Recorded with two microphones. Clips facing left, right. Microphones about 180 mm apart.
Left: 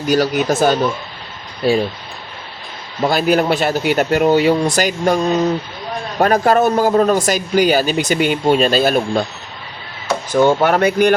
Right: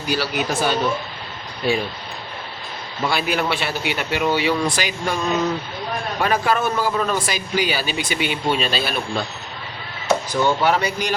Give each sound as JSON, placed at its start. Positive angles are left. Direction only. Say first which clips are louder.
{"t": 0.1, "sound": "speech", "louder": "left 8 dB", "side_deg": 45}
{"t": 3.0, "sound": "speech", "louder": "left 7 dB", "side_deg": 40}
{"t": 10.3, "sound": "speech", "louder": "left 8 dB", "side_deg": 50}